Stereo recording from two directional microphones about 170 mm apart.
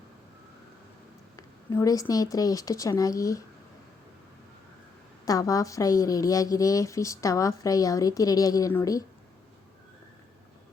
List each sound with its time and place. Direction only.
1.4 s speech: 20° left (ahead or behind)
5.2 s speech: 20° left (ahead or behind)